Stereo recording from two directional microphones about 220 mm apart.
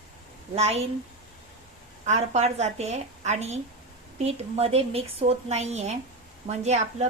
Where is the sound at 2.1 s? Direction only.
30° right (ahead or behind).